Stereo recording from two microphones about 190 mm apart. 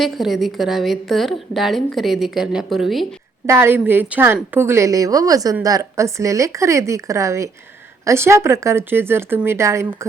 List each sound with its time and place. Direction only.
0.0 s a woman's voice: centre (ahead or behind)
3.4 s a woman's voice: 15° right (ahead or behind)